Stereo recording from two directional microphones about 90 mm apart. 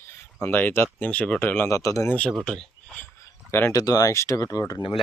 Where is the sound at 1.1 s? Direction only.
15° left (ahead or behind).